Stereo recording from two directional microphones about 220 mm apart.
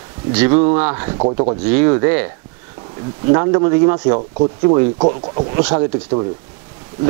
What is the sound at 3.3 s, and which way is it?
Speech, 20° right (ahead or behind).